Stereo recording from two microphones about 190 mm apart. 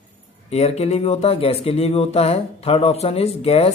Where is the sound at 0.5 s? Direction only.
35° left (ahead or behind).